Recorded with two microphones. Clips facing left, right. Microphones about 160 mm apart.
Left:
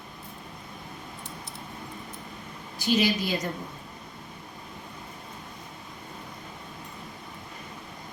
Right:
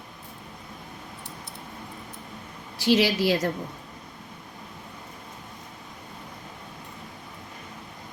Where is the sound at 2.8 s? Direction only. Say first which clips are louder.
Right 4 dB; 90° right.